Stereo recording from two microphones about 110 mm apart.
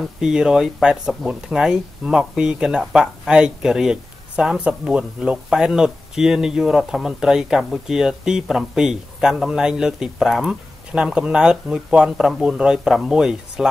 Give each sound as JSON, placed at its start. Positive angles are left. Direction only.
{"t": 0.0, "sound": "speech", "side_deg": -5}